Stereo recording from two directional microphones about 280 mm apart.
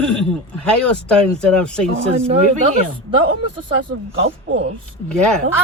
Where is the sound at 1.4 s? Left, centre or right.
Centre.